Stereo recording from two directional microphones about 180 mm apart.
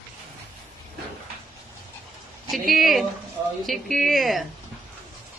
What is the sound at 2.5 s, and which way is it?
A woman's voice, centre (ahead or behind).